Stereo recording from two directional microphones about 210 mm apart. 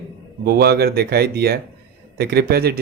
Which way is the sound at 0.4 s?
50° right (ahead or behind).